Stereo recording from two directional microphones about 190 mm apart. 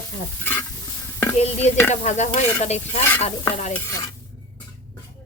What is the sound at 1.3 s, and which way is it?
Speech, 35° left (ahead or behind).